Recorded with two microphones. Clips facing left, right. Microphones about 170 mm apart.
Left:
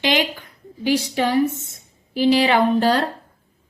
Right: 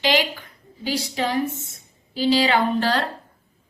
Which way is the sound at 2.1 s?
55° left (ahead or behind).